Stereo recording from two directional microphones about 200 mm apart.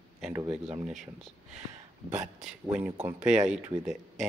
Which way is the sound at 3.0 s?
5° right (ahead or behind).